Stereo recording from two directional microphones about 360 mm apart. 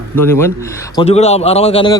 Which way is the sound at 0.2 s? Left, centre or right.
Centre.